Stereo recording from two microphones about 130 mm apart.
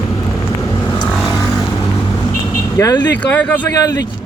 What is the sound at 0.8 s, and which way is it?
Vehicle, 25° left (ahead or behind).